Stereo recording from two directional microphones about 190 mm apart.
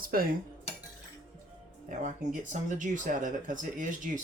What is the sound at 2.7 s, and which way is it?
Speech, 40° right (ahead or behind).